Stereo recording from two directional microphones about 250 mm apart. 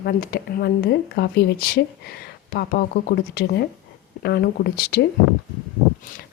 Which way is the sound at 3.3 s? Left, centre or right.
Left.